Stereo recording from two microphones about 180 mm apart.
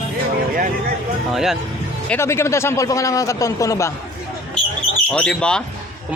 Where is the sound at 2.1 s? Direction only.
15° left (ahead or behind).